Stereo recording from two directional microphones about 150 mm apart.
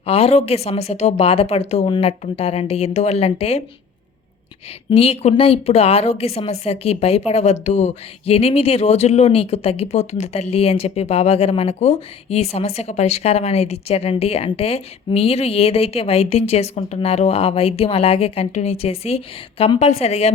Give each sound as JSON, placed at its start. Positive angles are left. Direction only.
{"t": 0.0, "sound": "a woman's voice", "side_deg": 40}
{"t": 4.9, "sound": "a woman's voice", "side_deg": 40}